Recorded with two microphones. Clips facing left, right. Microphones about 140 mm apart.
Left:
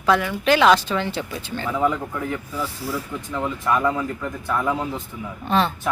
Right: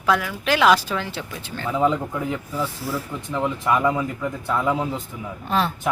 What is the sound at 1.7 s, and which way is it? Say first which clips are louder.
Speech: right 2 dB; 15° right (ahead or behind).